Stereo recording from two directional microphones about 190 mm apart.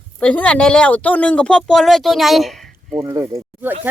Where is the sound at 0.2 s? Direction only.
5° left (ahead or behind).